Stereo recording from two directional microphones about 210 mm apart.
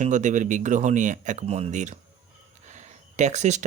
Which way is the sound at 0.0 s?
35° right (ahead or behind).